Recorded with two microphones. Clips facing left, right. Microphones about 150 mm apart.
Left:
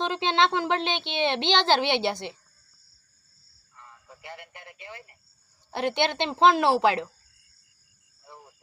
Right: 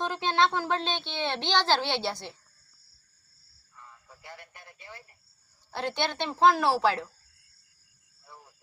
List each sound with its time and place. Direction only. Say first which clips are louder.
0.0 s a woman's voice: left 2 dB; 20° left (ahead or behind)
3.8 s a sound: left 3 dB; 20° left (ahead or behind)
5.7 s a woman's voice: left 5 dB; 20° left (ahead or behind)